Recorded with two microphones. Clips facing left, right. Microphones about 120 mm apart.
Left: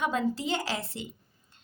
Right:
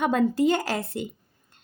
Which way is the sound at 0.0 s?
55° right (ahead or behind).